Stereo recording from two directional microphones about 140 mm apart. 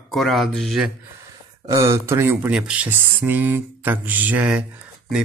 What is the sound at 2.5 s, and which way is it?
Speech, 5° right (ahead or behind).